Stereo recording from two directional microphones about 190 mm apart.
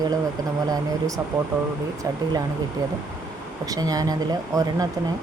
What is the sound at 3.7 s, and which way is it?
Speech, 20° right (ahead or behind).